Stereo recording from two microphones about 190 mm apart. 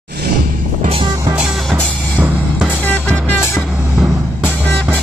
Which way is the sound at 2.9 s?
5° left (ahead or behind).